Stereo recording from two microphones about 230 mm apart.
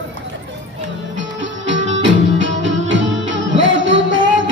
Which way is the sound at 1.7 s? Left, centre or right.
Right.